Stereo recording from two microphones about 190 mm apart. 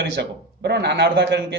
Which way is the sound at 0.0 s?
60° right (ahead or behind).